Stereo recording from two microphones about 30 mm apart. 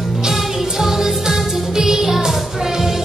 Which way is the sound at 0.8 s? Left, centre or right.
Centre.